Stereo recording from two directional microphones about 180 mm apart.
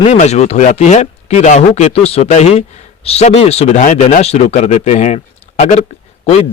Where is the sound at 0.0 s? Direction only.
35° left (ahead or behind).